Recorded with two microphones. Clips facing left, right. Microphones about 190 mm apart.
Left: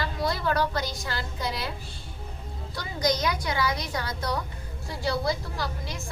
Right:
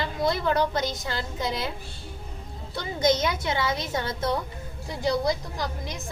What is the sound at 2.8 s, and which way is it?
A child's voice, 25° right (ahead or behind).